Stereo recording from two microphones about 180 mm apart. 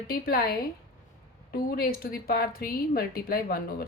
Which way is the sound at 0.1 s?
60° left (ahead or behind).